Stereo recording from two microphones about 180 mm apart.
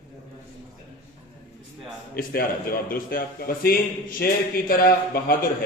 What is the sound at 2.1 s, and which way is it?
A man's voice, 55° left (ahead or behind).